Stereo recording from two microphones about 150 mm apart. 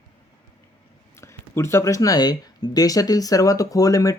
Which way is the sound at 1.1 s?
20° left (ahead or behind).